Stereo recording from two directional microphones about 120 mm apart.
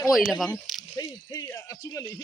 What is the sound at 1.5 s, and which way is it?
Speech, 25° left (ahead or behind).